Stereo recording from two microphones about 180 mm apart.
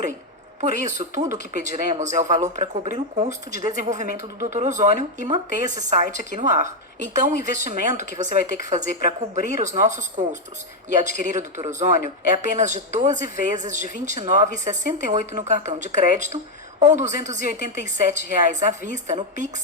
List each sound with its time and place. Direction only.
0.6 s a woman's voice: 40° right (ahead or behind)